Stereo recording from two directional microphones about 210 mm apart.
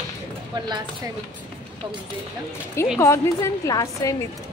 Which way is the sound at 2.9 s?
15° left (ahead or behind).